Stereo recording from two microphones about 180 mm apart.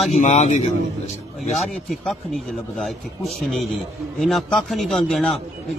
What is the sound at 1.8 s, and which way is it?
A man's voice, centre (ahead or behind).